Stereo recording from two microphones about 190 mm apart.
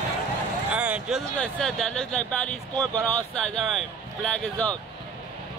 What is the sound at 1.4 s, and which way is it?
Speech, 5° left (ahead or behind).